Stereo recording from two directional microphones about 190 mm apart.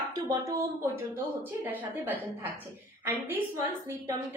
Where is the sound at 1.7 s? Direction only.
10° right (ahead or behind).